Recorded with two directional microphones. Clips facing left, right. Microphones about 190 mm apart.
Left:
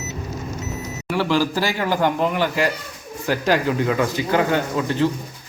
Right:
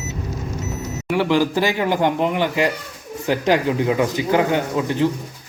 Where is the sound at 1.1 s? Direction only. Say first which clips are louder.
Right 2 dB; 20° right (ahead or behind).